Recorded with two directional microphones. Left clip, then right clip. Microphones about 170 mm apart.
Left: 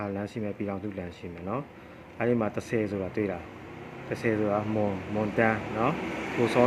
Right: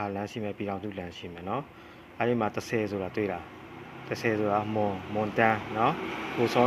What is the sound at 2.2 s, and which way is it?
Speech, 15° right (ahead or behind).